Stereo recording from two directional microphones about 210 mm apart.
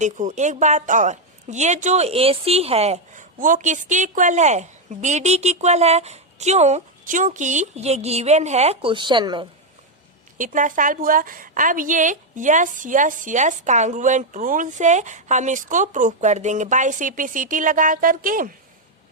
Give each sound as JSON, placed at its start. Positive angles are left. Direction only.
{"t": 0.0, "sound": "a woman's voice", "side_deg": -35}
{"t": 10.3, "sound": "a woman's voice", "side_deg": -40}